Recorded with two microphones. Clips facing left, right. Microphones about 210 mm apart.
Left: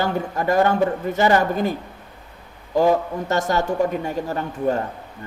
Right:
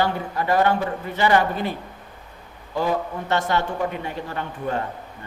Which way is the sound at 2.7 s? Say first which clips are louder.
Left 6 dB; 45° left (ahead or behind).